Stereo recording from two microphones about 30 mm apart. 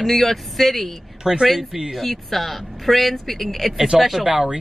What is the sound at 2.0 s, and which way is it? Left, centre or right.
Speech, centre.